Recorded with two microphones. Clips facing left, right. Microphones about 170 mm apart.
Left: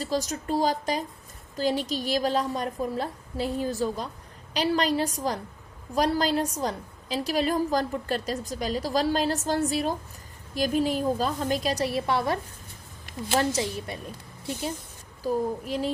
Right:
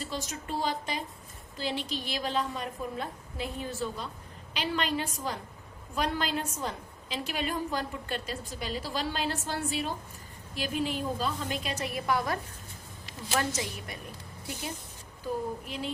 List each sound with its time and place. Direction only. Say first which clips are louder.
0.0 s a woman's voice: left 8 dB; 40° left (ahead or behind)
15.2 s a woman's voice: left 6 dB; 40° left (ahead or behind)